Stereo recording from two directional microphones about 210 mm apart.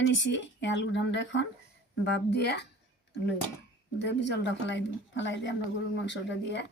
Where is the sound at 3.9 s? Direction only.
55° left (ahead or behind).